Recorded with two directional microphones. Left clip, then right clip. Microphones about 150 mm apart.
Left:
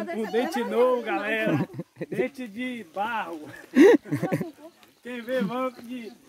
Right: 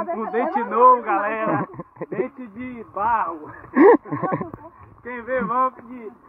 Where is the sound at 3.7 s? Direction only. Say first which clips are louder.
Right 3 dB; 45° left (ahead or behind).